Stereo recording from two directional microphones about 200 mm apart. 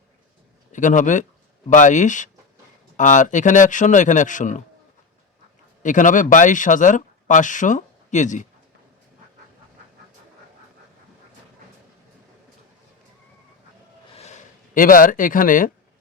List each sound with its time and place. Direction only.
0.7 s speech: 40° left (ahead or behind)
5.8 s speech: 40° left (ahead or behind)
14.1 s a sound: 35° left (ahead or behind)